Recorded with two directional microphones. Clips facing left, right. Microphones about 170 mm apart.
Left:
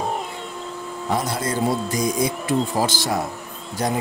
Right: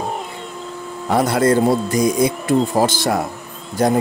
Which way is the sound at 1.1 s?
65° right (ahead or behind).